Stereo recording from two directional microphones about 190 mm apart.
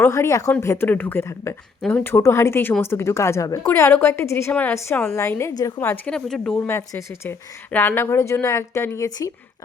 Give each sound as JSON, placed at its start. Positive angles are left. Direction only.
{"t": 0.0, "sound": "speech", "side_deg": 15}